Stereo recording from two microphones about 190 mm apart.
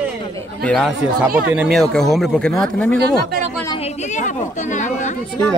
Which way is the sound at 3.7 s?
35° left (ahead or behind).